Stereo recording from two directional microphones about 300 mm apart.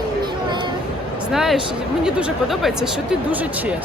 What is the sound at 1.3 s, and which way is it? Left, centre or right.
Speech, centre.